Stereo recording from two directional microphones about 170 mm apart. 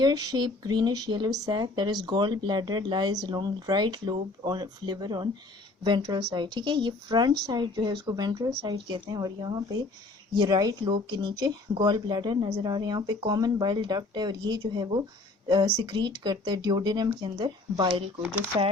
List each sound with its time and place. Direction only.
0.0 s speech: 20° right (ahead or behind)